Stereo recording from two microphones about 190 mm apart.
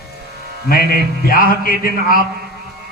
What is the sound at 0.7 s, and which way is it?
A man's voice, 50° left (ahead or behind).